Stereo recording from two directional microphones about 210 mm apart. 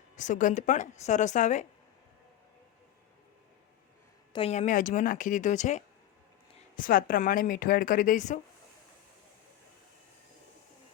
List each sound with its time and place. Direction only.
0.2 s a woman's voice: 35° left (ahead or behind)
4.3 s a woman's voice: 25° left (ahead or behind)